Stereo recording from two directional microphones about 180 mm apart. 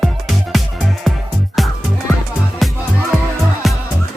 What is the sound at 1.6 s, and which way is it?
Music, centre (ahead or behind).